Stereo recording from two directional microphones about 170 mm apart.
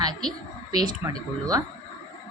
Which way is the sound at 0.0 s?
25° right (ahead or behind).